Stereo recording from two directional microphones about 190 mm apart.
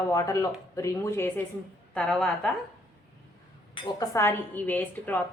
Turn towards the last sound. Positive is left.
turn(degrees=10)  # may be behind; listen again after turning